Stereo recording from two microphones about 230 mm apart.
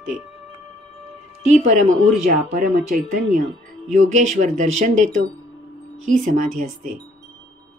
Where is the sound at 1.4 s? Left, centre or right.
Right.